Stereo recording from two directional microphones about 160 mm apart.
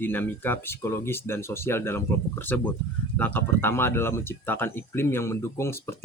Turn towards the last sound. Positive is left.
turn(degrees=15)  # may be behind; listen again after turning